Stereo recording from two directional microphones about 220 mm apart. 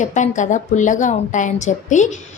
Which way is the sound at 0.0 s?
35° left (ahead or behind).